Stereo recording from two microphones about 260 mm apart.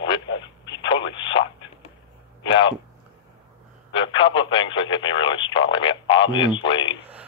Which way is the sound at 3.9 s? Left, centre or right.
Centre.